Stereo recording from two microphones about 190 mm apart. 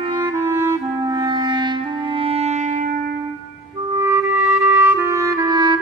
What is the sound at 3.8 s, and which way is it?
Clarinet, 20° right (ahead or behind).